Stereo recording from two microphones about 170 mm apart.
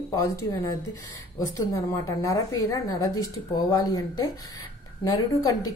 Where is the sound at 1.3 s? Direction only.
20° left (ahead or behind).